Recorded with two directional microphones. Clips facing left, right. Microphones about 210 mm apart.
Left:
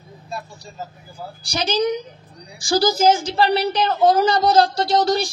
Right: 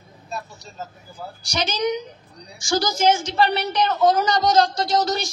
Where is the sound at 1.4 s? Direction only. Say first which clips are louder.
Left 3 dB; 35° left (ahead or behind).